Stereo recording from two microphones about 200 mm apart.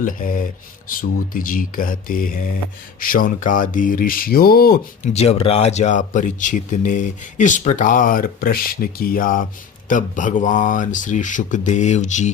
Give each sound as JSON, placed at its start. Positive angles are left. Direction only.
{"t": 0.0, "sound": "speech", "side_deg": 40}
{"t": 5.1, "sound": "speech", "side_deg": 30}